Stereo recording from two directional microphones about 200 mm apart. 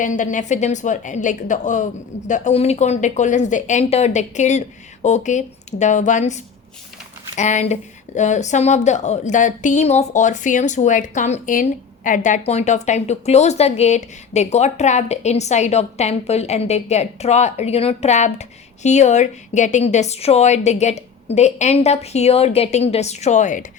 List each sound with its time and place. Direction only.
0.0 s speech: 40° left (ahead or behind)